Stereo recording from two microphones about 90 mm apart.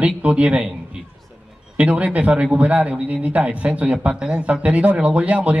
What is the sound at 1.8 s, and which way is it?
Speech, 15° right (ahead or behind).